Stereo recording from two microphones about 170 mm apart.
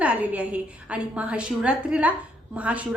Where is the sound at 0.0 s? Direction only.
10° right (ahead or behind).